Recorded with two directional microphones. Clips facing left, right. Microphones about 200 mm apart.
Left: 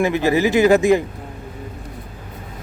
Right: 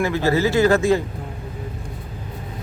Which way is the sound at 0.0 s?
15° left (ahead or behind).